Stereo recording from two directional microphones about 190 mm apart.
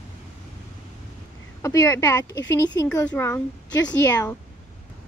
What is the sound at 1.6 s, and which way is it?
Speech, 15° left (ahead or behind).